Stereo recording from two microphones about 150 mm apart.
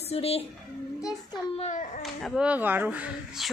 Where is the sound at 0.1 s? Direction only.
40° left (ahead or behind).